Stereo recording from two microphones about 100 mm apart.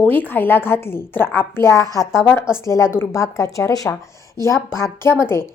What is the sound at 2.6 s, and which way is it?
A woman's voice, 30° left (ahead or behind).